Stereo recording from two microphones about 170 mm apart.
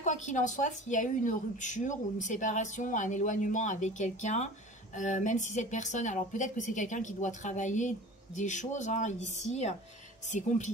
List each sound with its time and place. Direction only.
0.0 s speech: 45° left (ahead or behind)